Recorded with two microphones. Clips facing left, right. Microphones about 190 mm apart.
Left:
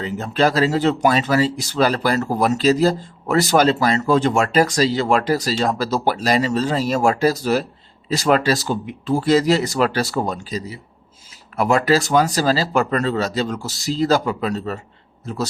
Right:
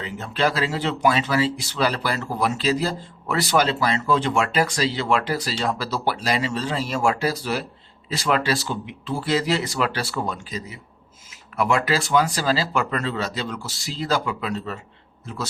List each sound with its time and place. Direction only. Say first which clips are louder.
0.0 s speech: left 5 dB; 40° left (ahead or behind)